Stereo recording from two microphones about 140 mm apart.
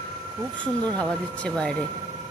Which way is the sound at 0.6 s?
10° left (ahead or behind).